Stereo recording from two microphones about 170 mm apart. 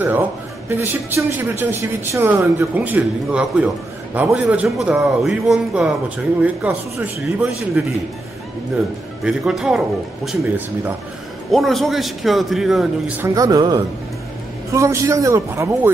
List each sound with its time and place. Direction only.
0.7 s a man's voice: 15° right (ahead or behind)
9.2 s a man's voice: 5° right (ahead or behind)
11.5 s a man's voice: centre (ahead or behind)
13.2 s speech: 20° right (ahead or behind)